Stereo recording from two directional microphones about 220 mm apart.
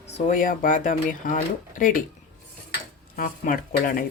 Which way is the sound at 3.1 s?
40° left (ahead or behind).